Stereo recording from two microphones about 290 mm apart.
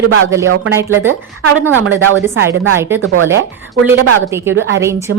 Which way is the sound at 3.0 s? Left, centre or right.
Right.